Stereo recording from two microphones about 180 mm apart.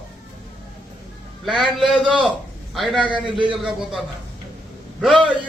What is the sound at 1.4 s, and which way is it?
A man's voice, centre (ahead or behind).